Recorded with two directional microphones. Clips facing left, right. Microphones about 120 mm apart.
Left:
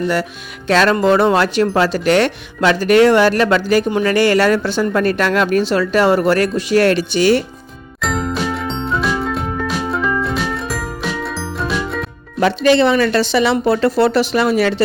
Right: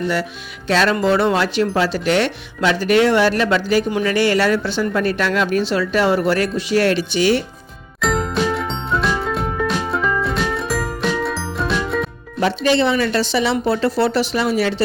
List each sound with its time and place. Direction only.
0.7 s speech: 50° left (ahead or behind)
8.0 s music: centre (ahead or behind)
12.4 s speech: 65° left (ahead or behind)